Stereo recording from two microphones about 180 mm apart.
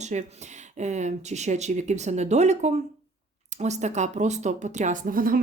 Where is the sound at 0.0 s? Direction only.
40° right (ahead or behind).